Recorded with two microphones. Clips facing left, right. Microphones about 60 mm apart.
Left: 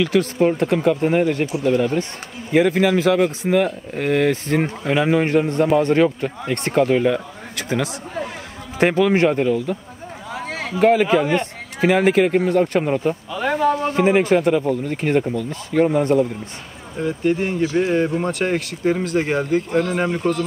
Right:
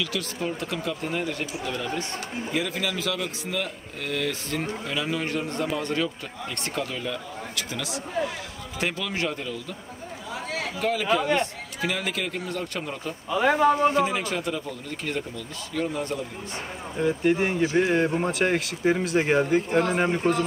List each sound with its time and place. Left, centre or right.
0.0 s a man's voice: left
13.3 s speech: centre
13.9 s speech: left
17.0 s speech: centre
17.8 s speech: centre
19.7 s speech: right